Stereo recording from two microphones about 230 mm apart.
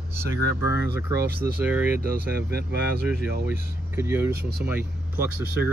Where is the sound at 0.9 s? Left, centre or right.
Centre.